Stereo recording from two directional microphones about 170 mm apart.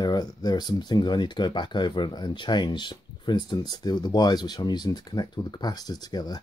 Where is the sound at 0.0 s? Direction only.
25° left (ahead or behind).